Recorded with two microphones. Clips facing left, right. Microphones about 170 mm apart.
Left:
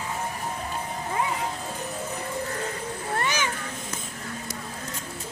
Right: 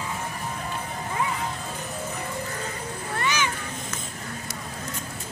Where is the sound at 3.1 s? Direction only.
45° left (ahead or behind).